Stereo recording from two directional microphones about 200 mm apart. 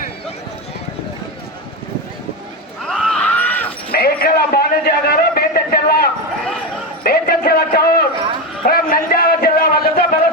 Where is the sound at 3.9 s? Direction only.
50° left (ahead or behind).